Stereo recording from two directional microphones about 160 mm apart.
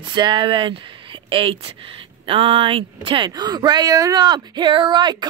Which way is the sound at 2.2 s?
35° right (ahead or behind).